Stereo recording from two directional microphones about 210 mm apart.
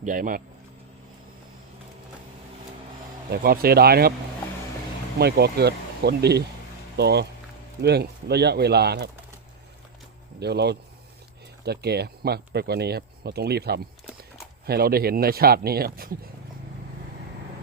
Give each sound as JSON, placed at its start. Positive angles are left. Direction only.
{"t": 0.0, "sound": "speech", "side_deg": -40}
{"t": 3.4, "sound": "speech", "side_deg": -45}
{"t": 5.2, "sound": "speech", "side_deg": -50}
{"t": 10.4, "sound": "speech", "side_deg": -50}